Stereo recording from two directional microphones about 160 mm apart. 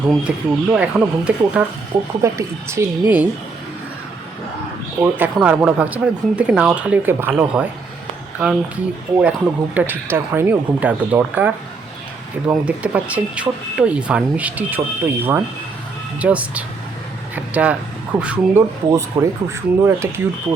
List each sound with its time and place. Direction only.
0.3 s speech: 5° right (ahead or behind)
2.2 s speech: 20° right (ahead or behind)
5.1 s speech: 10° right (ahead or behind)
18.9 s speech: 20° right (ahead or behind)